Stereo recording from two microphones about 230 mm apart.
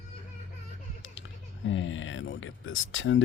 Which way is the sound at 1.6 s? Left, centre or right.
Left.